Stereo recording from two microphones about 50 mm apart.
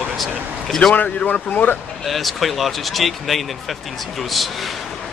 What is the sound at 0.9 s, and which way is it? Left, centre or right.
Speech, left.